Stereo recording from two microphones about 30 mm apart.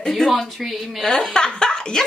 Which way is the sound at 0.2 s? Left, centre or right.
Centre.